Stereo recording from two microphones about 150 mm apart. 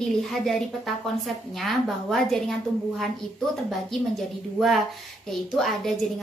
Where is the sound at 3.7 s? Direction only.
Centre (ahead or behind).